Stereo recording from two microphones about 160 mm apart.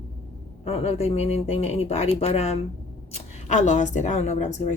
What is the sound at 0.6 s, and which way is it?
A woman's voice, 40° left (ahead or behind).